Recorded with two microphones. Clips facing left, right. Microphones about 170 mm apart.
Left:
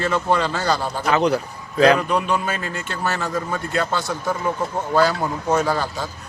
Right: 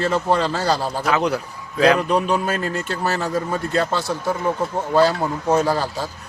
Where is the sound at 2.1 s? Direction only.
40° right (ahead or behind).